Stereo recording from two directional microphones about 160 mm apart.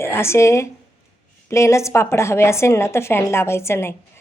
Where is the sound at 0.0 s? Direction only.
15° left (ahead or behind).